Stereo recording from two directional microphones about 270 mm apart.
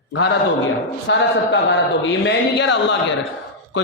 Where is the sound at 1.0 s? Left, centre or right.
Left.